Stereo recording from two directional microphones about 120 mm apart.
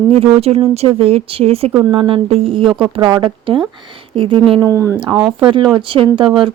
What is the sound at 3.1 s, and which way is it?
Speech, 40° right (ahead or behind).